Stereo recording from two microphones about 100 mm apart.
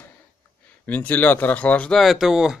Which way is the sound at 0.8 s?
15° left (ahead or behind).